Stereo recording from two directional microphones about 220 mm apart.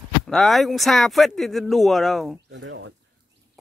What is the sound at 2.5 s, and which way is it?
Speech, 60° right (ahead or behind).